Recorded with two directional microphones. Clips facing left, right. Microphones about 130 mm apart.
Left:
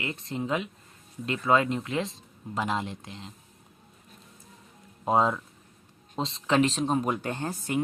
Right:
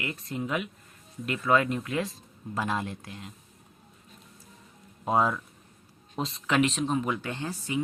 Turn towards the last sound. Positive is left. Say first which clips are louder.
# left 2 dB
turn(degrees=50)  # may be behind; listen again after turning